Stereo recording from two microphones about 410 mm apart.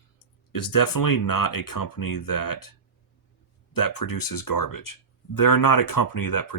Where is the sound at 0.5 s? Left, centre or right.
Left.